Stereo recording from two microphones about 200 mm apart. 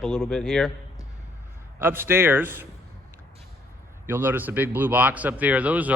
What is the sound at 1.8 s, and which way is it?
Speech, 10° right (ahead or behind).